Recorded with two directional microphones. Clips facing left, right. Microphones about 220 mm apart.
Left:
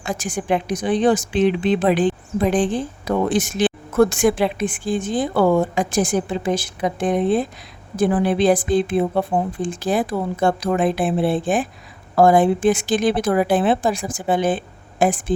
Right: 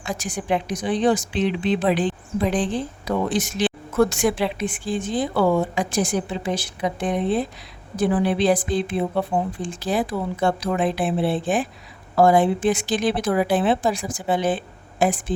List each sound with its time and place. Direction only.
0.0 s a woman's voice: 50° left (ahead or behind)